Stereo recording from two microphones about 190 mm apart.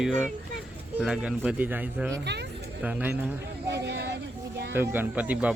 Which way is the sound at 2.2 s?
65° right (ahead or behind).